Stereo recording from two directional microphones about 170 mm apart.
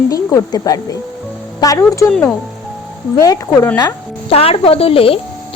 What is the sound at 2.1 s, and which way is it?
Speech, 5° left (ahead or behind).